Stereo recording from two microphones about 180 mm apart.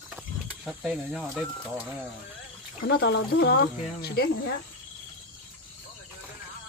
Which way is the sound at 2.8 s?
65° left (ahead or behind).